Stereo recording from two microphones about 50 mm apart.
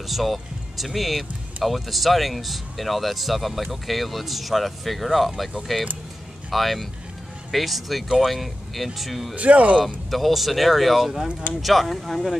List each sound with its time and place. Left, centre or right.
0.0 s speech: centre
9.3 s speech: right
10.1 s speech: centre